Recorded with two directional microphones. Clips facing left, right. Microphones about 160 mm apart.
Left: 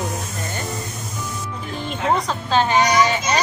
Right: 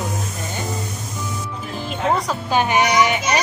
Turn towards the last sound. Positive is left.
turn(degrees=-15)  # may be behind; listen again after turning